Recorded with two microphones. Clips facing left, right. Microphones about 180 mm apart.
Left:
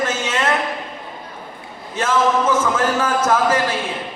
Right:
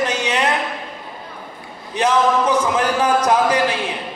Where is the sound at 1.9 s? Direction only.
15° right (ahead or behind).